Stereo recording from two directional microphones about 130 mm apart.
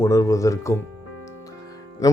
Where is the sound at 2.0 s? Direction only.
25° left (ahead or behind).